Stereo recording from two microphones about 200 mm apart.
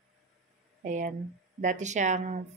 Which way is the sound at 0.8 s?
40° right (ahead or behind).